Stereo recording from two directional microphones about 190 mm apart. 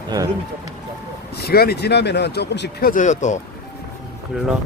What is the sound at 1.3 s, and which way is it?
Speech, 55° left (ahead or behind).